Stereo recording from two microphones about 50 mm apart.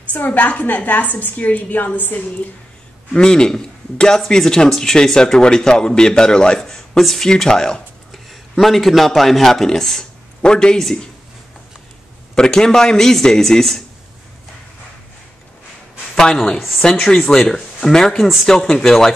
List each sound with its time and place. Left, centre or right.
0.1 s a woman's voice: left
3.1 s a man's voice: centre
8.1 s speech: centre
12.4 s a man's voice: centre
16.5 s a woman's voice: centre
16.8 s a man's voice: centre